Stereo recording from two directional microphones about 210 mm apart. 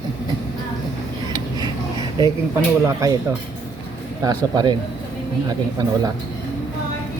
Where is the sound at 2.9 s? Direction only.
15° right (ahead or behind).